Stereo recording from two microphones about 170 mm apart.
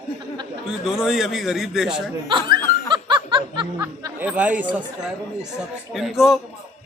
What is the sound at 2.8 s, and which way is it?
Snicker, 30° right (ahead or behind).